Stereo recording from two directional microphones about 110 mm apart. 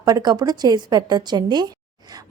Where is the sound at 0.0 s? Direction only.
40° right (ahead or behind).